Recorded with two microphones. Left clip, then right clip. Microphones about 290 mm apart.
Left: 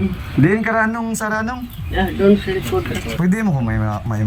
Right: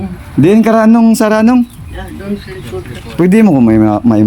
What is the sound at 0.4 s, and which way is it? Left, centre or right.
Speech, right.